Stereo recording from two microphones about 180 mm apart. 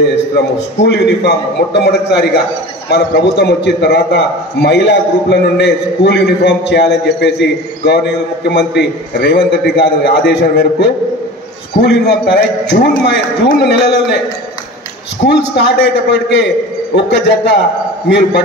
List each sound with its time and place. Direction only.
0.7 s a man's voice: 75° left (ahead or behind)
15.2 s a man's voice: 75° left (ahead or behind)